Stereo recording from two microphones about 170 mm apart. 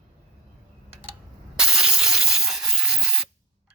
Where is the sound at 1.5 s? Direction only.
5° right (ahead or behind).